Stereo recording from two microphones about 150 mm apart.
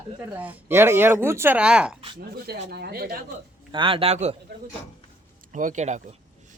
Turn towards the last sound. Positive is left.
turn(degrees=-55)  # may be behind; listen again after turning